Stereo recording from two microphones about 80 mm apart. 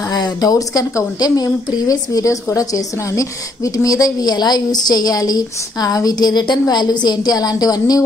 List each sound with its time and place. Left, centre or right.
0.1 s a woman's voice: left